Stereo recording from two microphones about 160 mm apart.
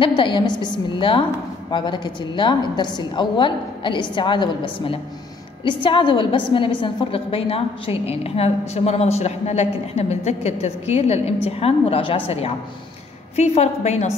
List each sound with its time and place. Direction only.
0.0 s a woman's voice: 30° left (ahead or behind)